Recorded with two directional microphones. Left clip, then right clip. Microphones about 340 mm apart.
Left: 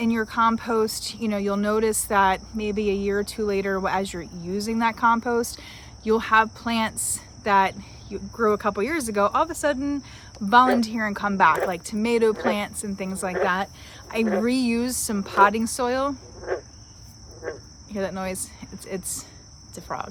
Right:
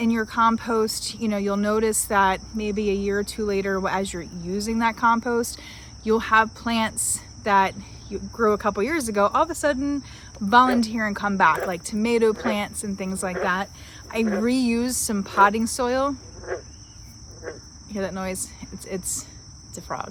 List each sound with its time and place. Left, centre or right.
0.0 s speech: centre
17.4 s cricket: left
17.9 s speech: centre